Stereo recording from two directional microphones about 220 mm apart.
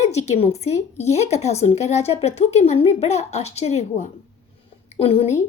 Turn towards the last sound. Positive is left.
turn(degrees=25)  # may be behind; listen again after turning